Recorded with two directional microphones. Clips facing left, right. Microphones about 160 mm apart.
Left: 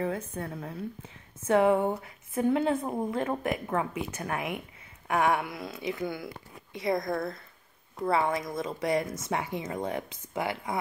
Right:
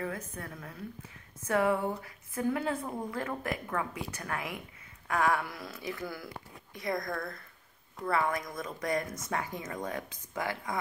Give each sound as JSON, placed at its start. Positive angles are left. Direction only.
{"t": 0.0, "sound": "a woman's voice", "side_deg": 30}